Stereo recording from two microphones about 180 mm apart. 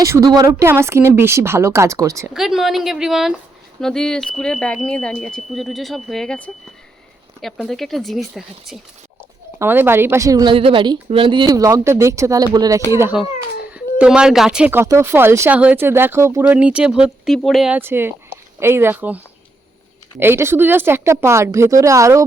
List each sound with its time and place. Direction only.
0.0 s speech: 15° right (ahead or behind)
2.3 s speech: centre (ahead or behind)
9.6 s a woman's voice: 10° right (ahead or behind)